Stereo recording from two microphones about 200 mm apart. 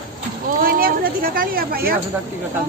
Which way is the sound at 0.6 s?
45° right (ahead or behind).